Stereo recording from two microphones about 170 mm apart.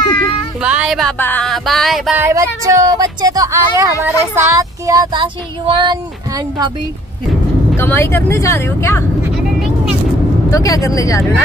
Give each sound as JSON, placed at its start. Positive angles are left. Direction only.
{"t": 0.6, "sound": "music", "side_deg": -5}
{"t": 2.1, "sound": "speech", "side_deg": -15}
{"t": 7.7, "sound": "speech", "side_deg": 15}
{"t": 10.5, "sound": "speech", "side_deg": 20}